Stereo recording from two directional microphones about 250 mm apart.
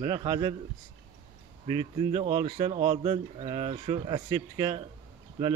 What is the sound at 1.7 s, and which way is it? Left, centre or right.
Speech, right.